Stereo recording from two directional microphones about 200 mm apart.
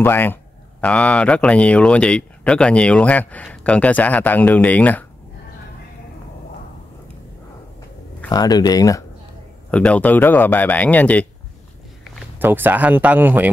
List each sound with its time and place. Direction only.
0.0 s speech: 10° left (ahead or behind)
8.3 s speech: 20° left (ahead or behind)
9.7 s speech: 5° left (ahead or behind)
12.4 s speech: 10° right (ahead or behind)